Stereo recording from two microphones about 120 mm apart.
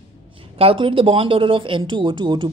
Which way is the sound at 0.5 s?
50° right (ahead or behind).